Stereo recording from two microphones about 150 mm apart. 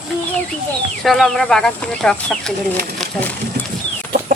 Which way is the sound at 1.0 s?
Centre (ahead or behind).